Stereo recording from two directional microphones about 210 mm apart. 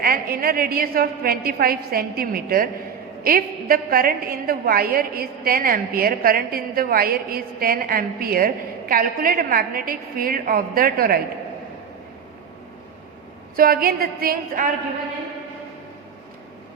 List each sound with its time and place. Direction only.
0.0 s a woman's voice: 45° right (ahead or behind)
13.6 s a woman's voice: 45° right (ahead or behind)